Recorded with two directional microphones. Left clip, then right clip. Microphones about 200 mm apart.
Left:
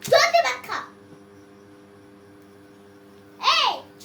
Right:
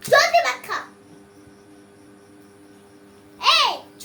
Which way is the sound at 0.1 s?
15° right (ahead or behind).